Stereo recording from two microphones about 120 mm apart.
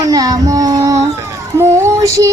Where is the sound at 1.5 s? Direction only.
25° right (ahead or behind).